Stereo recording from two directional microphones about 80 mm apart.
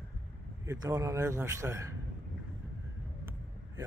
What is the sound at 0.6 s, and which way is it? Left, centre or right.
A man's voice, right.